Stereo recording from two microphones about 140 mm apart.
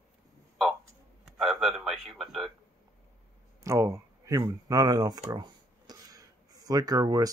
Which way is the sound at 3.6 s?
20° right (ahead or behind).